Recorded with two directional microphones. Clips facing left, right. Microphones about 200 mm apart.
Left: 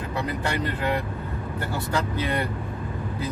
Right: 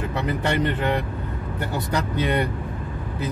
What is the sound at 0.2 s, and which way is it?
Speech, 25° right (ahead or behind).